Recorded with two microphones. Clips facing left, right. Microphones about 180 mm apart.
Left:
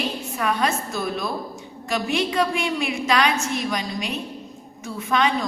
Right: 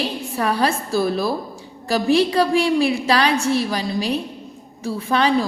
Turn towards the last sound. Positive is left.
turn(degrees=-35)  # may be behind; listen again after turning